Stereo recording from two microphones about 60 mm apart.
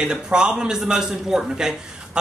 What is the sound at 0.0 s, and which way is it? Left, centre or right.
A man's voice, centre.